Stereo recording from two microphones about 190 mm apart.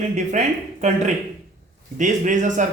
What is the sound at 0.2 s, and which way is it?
Speech, 40° right (ahead or behind).